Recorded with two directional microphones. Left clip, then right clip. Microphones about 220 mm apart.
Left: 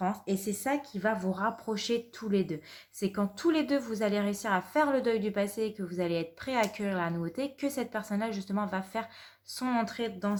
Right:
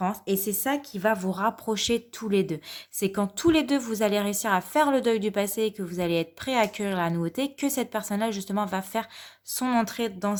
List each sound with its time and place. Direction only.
0.0 s a woman's voice: 35° right (ahead or behind)